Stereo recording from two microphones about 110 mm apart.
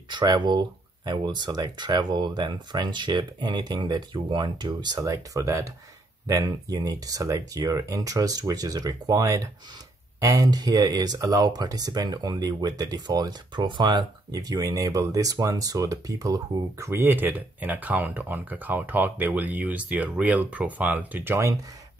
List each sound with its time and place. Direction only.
0.1 s speech: 40° right (ahead or behind); by 21.5 s 25° right (ahead or behind)